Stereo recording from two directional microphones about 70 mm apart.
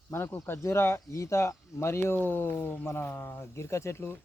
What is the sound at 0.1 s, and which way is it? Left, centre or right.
Speech, left.